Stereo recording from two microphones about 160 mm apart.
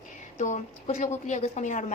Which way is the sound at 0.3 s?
50° left (ahead or behind).